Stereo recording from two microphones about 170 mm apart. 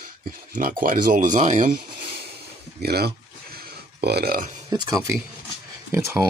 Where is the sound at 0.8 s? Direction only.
55° right (ahead or behind).